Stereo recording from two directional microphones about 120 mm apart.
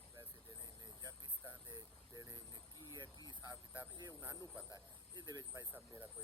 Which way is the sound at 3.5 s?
15° right (ahead or behind).